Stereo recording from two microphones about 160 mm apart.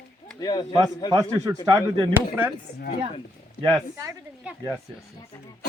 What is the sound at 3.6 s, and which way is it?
Speech, 20° right (ahead or behind).